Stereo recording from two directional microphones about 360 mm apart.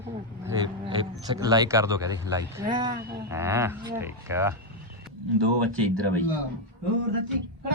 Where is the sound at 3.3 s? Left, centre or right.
Centre.